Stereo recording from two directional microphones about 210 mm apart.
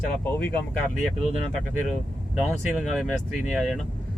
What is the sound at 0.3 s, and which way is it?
Speech, 10° left (ahead or behind).